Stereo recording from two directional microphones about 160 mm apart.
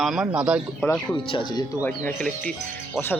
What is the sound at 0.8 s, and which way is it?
Speech, 10° left (ahead or behind).